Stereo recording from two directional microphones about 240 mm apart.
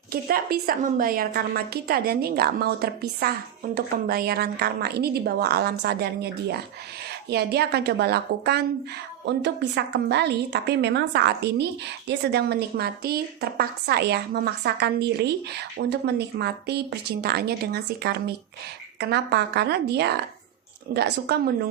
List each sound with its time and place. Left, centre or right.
0.1 s a woman's voice: right